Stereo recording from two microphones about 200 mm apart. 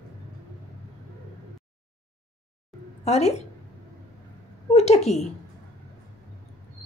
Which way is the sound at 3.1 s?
30° left (ahead or behind).